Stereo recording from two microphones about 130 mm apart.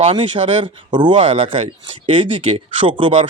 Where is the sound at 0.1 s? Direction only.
40° right (ahead or behind).